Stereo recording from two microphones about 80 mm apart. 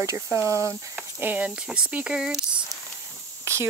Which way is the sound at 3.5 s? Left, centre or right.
Right.